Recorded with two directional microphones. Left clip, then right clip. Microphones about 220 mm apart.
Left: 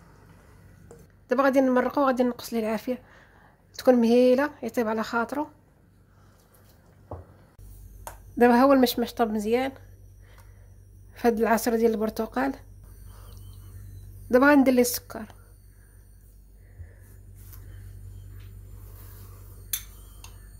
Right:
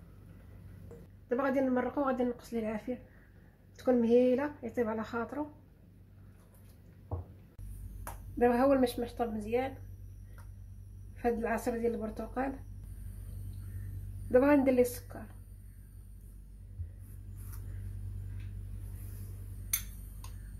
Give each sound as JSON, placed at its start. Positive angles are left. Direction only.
{"t": 1.3, "sound": "a woman's voice", "side_deg": 50}
{"t": 8.4, "sound": "speech", "side_deg": 55}
{"t": 11.1, "sound": "a woman's voice", "side_deg": 55}
{"t": 14.3, "sound": "speech", "side_deg": 55}